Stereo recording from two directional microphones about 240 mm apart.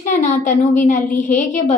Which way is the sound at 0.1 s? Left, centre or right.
Left.